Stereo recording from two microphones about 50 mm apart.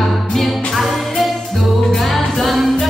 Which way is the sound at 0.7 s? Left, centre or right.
Centre.